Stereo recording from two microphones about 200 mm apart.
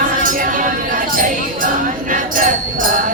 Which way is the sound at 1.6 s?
40° right (ahead or behind).